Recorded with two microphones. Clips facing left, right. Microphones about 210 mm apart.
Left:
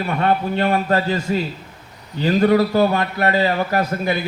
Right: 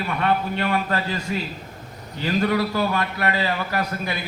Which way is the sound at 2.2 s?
35° left (ahead or behind).